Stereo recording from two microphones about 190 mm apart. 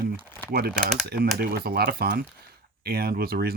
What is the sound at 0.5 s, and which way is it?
Speech, 55° right (ahead or behind).